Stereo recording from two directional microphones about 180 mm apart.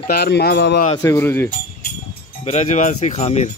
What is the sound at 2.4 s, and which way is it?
Jingle bell, 40° left (ahead or behind).